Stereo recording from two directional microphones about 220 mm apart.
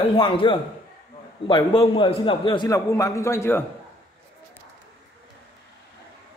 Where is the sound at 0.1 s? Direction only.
20° left (ahead or behind).